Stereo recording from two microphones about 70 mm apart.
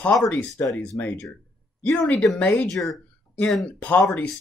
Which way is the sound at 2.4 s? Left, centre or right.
Left.